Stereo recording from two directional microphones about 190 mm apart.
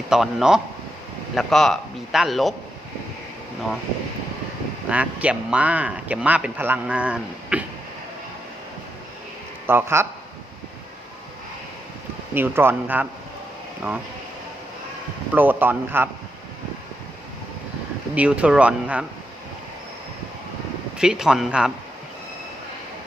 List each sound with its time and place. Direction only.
0.1 s a man's voice: centre (ahead or behind)
4.9 s speech: 5° right (ahead or behind)
9.6 s speech: 10° right (ahead or behind)
12.3 s speech: 10° right (ahead or behind)
15.4 s speech: 10° right (ahead or behind)
18.1 s speech: 5° right (ahead or behind)
21.0 s a man's voice: 5° right (ahead or behind)